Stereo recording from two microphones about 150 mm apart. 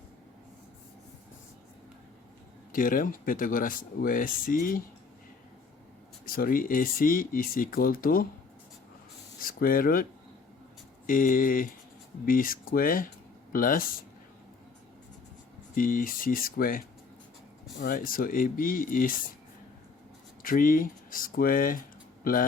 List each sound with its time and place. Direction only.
2.7 s speech: 70° left (ahead or behind)
6.2 s speech: 75° left (ahead or behind)
9.4 s speech: 70° left (ahead or behind)
15.7 s speech: 65° left (ahead or behind)
20.4 s speech: 65° left (ahead or behind)